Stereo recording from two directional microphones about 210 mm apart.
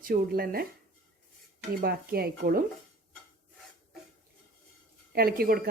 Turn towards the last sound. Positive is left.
turn(degrees=-45)  # may be behind; listen again after turning